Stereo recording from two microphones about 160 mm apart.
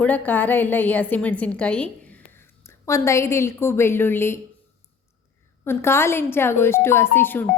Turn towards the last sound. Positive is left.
turn(degrees=10)  # may be behind; listen again after turning